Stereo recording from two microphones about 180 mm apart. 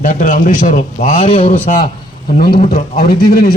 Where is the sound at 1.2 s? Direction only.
30° left (ahead or behind).